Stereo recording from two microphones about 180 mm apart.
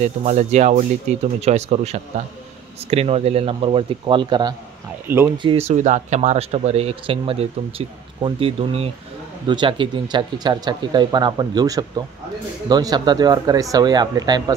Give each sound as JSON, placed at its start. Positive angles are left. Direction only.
{"t": 0.0, "sound": "speech", "side_deg": -40}
{"t": 5.0, "sound": "speech", "side_deg": -10}
{"t": 5.4, "sound": "speech", "side_deg": -30}